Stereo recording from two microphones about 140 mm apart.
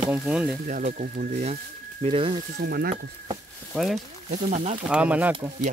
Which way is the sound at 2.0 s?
40° right (ahead or behind).